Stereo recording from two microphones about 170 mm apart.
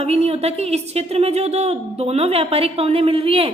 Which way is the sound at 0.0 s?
35° right (ahead or behind).